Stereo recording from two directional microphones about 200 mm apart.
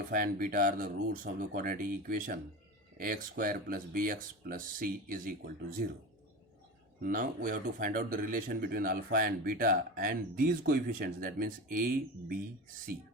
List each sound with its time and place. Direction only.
0.1 s speech: 45° right (ahead or behind)
7.0 s speech: 40° right (ahead or behind)